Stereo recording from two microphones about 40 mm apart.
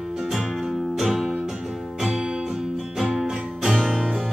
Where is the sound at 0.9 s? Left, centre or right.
Centre.